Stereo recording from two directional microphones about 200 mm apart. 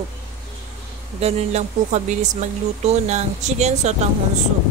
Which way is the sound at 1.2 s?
35° right (ahead or behind).